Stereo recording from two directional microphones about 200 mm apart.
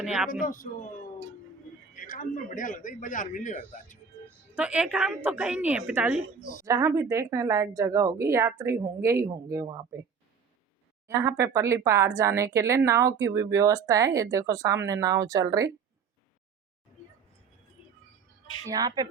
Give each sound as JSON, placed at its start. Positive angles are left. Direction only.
{"t": 0.0, "sound": "a woman's voice", "side_deg": 0}
{"t": 0.3, "sound": "speech", "side_deg": 45}
{"t": 1.9, "sound": "a man's voice", "side_deg": 40}
{"t": 4.5, "sound": "a woman's voice", "side_deg": -5}
{"t": 11.1, "sound": "speech", "side_deg": -15}
{"t": 18.7, "sound": "speech", "side_deg": -20}